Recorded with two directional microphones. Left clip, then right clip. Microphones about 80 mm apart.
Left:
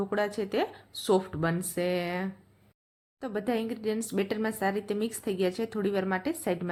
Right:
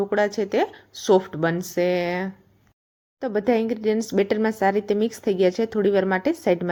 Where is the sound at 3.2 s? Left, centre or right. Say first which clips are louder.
Right 10 dB; right.